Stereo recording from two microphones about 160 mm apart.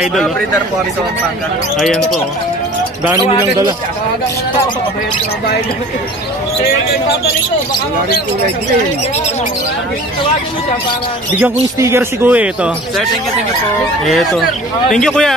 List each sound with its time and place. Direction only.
0.0 s a man's voice: centre (ahead or behind)
3.1 s a man's voice: 25° right (ahead or behind)
11.8 s speech: 15° right (ahead or behind)
14.0 s a man's voice: centre (ahead or behind)